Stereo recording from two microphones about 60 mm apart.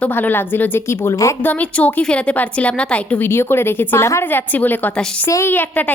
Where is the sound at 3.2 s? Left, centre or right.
Left.